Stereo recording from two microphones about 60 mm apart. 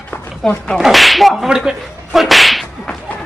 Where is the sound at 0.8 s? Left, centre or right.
Centre.